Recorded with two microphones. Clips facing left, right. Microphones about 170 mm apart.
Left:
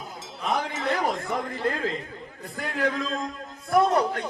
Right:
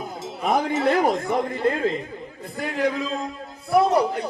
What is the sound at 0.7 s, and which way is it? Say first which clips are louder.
Music: right 7 dB; 30° right (ahead or behind).